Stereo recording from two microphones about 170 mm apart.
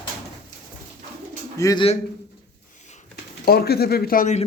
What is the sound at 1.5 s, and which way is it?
Speech, 20° left (ahead or behind).